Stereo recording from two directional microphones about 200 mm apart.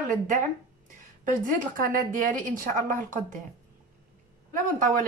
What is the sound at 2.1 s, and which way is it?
A woman's voice, 40° right (ahead or behind).